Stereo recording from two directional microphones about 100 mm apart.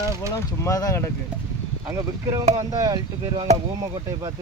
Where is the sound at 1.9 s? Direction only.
30° right (ahead or behind).